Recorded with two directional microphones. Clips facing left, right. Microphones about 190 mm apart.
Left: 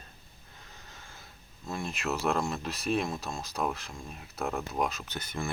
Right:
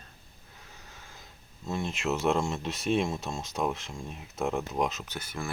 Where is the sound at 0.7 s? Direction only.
10° right (ahead or behind).